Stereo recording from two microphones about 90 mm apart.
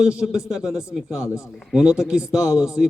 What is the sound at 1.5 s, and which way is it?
A man's voice, centre (ahead or behind).